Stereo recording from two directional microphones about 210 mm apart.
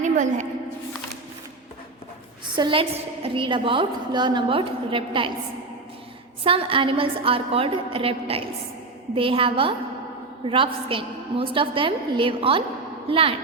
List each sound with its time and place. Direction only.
0.0 s a sound: 35° right (ahead or behind)
2.6 s a woman's voice: 25° right (ahead or behind)
6.4 s a woman's voice: 25° right (ahead or behind)